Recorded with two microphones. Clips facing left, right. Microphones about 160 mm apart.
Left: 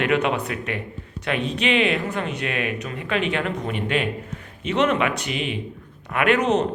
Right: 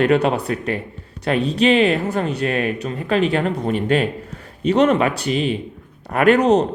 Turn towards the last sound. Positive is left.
turn(degrees=-35)  # may be behind; listen again after turning